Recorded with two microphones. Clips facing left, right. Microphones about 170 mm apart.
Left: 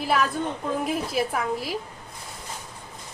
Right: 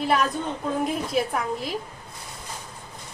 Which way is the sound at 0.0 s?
5° left (ahead or behind).